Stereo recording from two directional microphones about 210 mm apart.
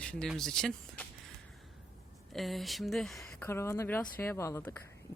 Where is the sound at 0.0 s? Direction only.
5° left (ahead or behind).